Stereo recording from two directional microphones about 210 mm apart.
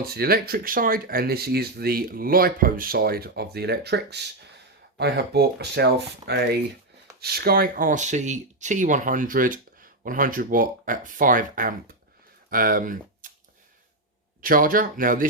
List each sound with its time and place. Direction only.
0.0 s speech: 45° right (ahead or behind)
14.4 s speech: 40° right (ahead or behind)